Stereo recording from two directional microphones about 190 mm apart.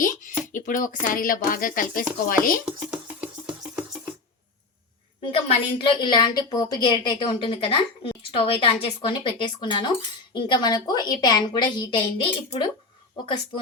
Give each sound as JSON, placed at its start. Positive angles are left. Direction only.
{"t": 0.0, "sound": "speech", "side_deg": 45}
{"t": 2.6, "sound": "music", "side_deg": -5}
{"t": 5.2, "sound": "a woman's voice", "side_deg": 30}